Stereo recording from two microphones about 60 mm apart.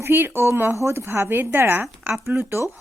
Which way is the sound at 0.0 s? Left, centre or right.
Right.